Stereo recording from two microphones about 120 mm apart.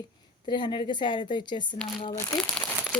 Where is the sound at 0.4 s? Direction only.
40° left (ahead or behind).